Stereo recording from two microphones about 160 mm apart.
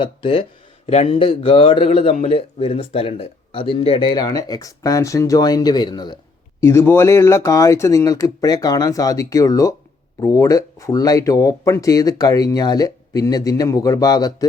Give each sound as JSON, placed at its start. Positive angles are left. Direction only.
{"t": 0.0, "sound": "a man's voice", "side_deg": 35}